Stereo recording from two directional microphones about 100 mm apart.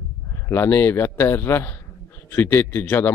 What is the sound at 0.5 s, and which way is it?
Speech, 25° left (ahead or behind).